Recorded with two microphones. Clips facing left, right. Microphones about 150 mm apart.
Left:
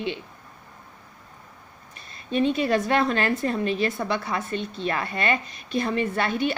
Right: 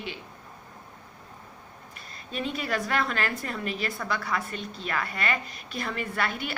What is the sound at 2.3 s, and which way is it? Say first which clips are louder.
A woman's voice: left 9 dB; 25° left (ahead or behind).